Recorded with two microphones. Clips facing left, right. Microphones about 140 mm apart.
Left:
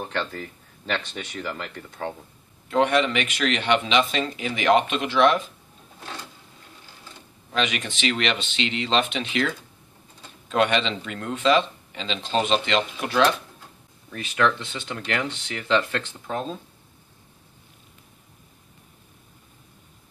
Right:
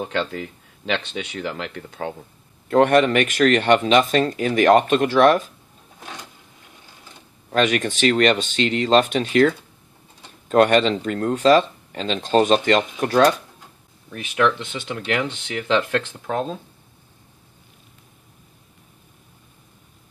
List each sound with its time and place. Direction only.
0.0 s speech: 90° right; by 2.0 s 65° right (ahead or behind)
2.7 s speech: 50° right (ahead or behind)
7.5 s speech: 50° right (ahead or behind)
15.4 s speech: 60° right (ahead or behind)